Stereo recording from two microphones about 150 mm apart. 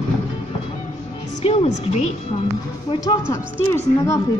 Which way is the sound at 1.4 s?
40° left (ahead or behind).